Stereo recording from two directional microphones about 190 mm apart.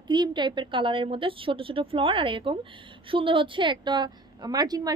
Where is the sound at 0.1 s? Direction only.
25° right (ahead or behind).